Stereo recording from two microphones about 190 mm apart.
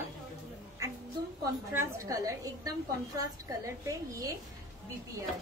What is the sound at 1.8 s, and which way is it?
A woman's voice, 15° right (ahead or behind).